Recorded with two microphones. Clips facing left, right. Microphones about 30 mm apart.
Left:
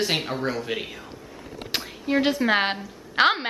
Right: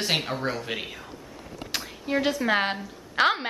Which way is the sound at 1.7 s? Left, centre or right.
Centre.